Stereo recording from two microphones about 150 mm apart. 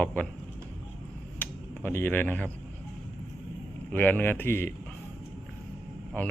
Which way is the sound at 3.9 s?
10° left (ahead or behind).